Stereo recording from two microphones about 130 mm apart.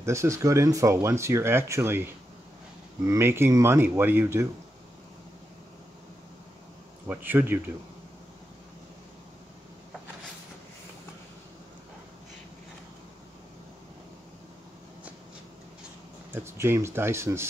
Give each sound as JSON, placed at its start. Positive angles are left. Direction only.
{"t": 0.0, "sound": "speech", "side_deg": -20}
{"t": 3.1, "sound": "speech", "side_deg": -20}
{"t": 7.1, "sound": "speech", "side_deg": -15}
{"t": 16.3, "sound": "speech", "side_deg": -20}